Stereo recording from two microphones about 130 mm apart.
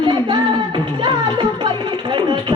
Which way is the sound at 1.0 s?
40° right (ahead or behind).